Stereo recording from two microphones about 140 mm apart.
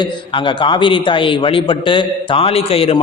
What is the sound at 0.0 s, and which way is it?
A man's voice, 35° left (ahead or behind).